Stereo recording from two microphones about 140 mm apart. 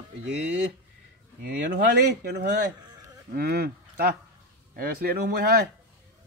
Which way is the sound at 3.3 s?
90° right.